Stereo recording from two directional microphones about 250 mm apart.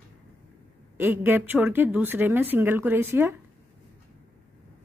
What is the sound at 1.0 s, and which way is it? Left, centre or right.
A woman's voice, centre.